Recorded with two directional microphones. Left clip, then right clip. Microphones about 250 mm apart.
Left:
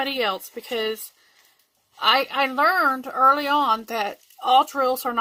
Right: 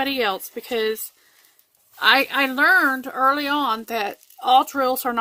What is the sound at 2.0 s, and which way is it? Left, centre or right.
A woman's voice, right.